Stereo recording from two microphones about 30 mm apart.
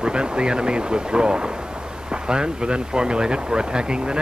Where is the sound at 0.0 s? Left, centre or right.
Right.